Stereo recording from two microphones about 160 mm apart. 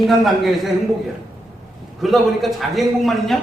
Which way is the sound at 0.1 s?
Centre (ahead or behind).